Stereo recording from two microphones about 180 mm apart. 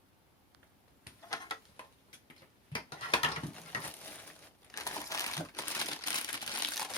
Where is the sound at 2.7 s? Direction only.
25° left (ahead or behind).